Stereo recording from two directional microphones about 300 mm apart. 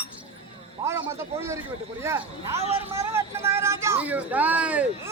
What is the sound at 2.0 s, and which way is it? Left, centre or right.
A man's voice, centre.